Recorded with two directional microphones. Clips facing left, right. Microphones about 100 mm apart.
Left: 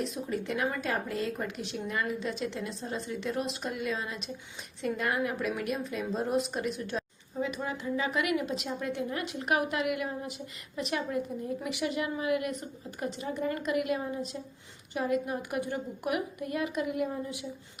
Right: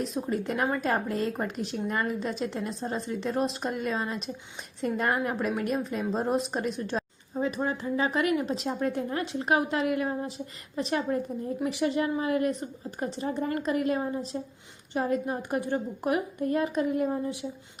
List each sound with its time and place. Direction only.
0.0 s a woman's voice: 35° right (ahead or behind)